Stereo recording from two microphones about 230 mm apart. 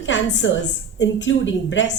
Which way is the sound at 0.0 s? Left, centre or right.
Left.